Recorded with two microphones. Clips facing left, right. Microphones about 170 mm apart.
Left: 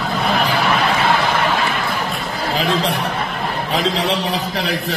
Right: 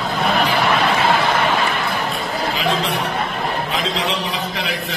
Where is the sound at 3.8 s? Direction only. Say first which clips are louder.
Left 3 dB; 35° left (ahead or behind).